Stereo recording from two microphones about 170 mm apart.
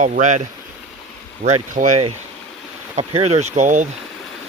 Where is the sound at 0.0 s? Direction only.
45° right (ahead or behind).